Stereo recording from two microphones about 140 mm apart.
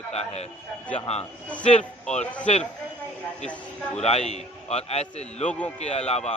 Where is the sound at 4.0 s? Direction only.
50° left (ahead or behind).